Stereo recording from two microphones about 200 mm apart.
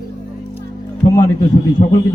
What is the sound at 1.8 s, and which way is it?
Speech, 25° left (ahead or behind).